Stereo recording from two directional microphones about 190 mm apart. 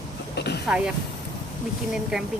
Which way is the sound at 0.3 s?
60° left (ahead or behind).